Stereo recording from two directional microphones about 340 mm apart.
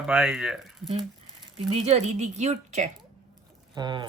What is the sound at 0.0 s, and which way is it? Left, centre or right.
Speech, centre.